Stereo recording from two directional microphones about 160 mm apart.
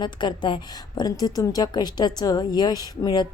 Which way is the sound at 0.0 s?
30° left (ahead or behind).